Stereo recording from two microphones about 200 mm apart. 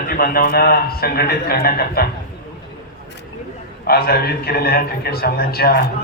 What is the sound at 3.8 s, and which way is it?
A man's voice, 50° left (ahead or behind).